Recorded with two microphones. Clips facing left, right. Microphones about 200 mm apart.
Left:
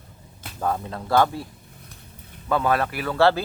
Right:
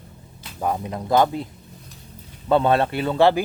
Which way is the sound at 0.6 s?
15° right (ahead or behind).